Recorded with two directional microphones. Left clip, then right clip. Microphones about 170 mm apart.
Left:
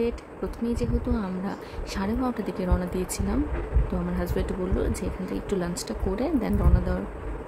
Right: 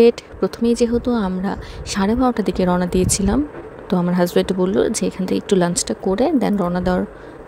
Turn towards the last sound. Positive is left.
turn(degrees=-55)  # may be behind; listen again after turning